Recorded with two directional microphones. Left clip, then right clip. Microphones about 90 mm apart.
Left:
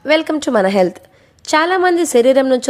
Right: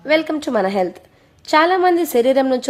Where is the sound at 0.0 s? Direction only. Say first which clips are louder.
Left 3 dB; 35° left (ahead or behind).